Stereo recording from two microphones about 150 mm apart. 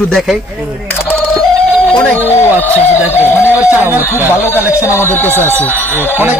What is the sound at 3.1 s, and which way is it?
Speech, 20° left (ahead or behind).